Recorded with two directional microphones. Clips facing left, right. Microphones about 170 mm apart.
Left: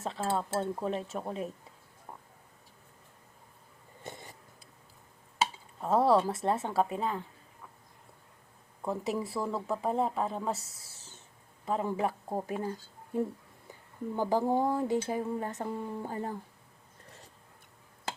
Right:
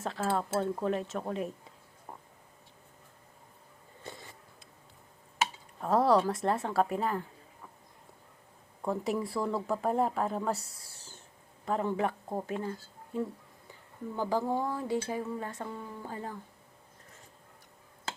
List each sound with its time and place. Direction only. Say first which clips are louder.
0.0 s speech: right 1 dB; centre (ahead or behind)
4.0 s a sound: left 1 dB; 20° left (ahead or behind)
5.8 s speech: even; centre (ahead or behind)
8.8 s speech: right 1 dB; centre (ahead or behind)
14.2 s speech: left 3 dB; 15° left (ahead or behind)